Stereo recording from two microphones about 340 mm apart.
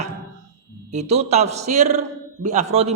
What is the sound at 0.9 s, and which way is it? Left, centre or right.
A man's voice, centre.